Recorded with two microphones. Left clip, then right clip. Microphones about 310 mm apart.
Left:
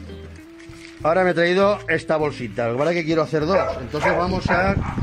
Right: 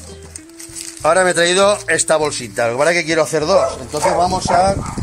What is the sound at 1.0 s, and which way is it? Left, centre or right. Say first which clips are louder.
Speech: right 5 dB; right.